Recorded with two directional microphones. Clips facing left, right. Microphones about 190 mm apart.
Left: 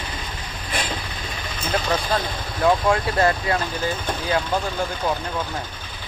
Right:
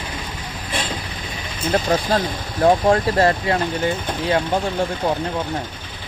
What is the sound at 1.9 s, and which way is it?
Speech, 35° right (ahead or behind).